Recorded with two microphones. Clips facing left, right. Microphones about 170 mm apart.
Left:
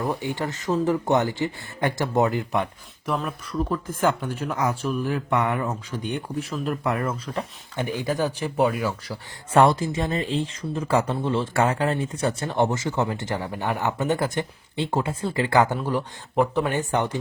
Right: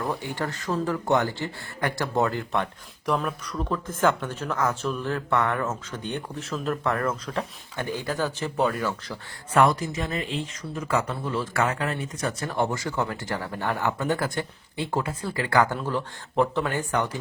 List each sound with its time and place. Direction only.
0.0 s speech: 15° left (ahead or behind)
3.1 s speech: centre (ahead or behind)
7.8 s speech: 15° left (ahead or behind)
9.5 s speech: 30° left (ahead or behind)